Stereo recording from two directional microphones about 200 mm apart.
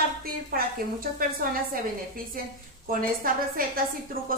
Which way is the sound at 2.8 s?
45° right (ahead or behind).